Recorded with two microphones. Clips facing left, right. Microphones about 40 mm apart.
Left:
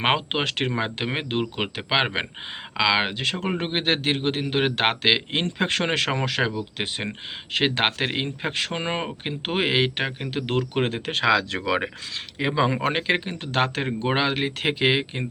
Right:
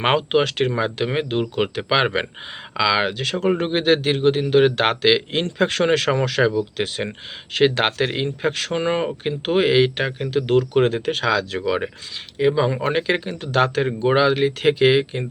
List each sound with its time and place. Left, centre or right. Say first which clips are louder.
0.0 s a man's voice: right 5 dB; centre
1.5 s a man's voice: right 5 dB; centre
10.8 s a man's voice: right 6 dB; centre
11.0 s speech: right 1 dB; left
12.8 s a man's voice: right 3 dB; left